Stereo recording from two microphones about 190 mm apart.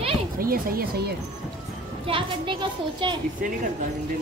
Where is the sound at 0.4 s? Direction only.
50° right (ahead or behind).